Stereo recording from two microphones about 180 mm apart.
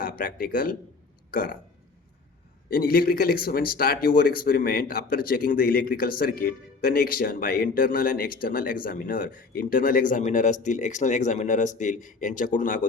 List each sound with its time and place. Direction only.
0.0 s speech: 50° left (ahead or behind)
1.3 s burping: 50° left (ahead or behind)
2.6 s speech: 55° left (ahead or behind)